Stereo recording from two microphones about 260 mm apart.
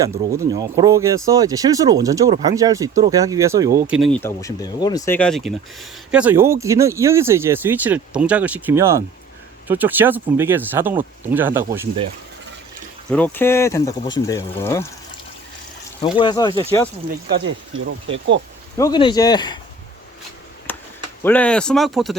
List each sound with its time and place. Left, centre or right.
0.0 s speech: centre
13.1 s speech: centre
16.1 s speech: centre
16.5 s speech: right
17.2 s speech: right
18.8 s speech: centre
20.7 s a sound: centre
21.2 s speech: centre